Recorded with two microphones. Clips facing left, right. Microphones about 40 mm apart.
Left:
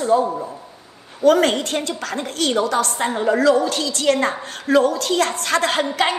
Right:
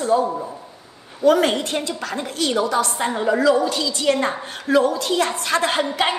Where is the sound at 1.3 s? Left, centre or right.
Left.